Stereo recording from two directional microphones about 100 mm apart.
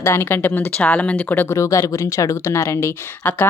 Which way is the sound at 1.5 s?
30° left (ahead or behind).